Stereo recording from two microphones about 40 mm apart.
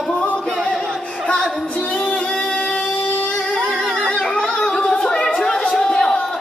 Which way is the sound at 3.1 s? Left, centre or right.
Left.